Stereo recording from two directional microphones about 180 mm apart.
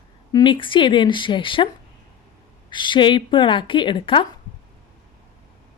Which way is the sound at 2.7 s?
25° left (ahead or behind).